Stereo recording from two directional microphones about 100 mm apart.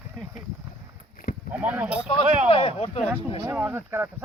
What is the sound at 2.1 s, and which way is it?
Speech, 70° left (ahead or behind).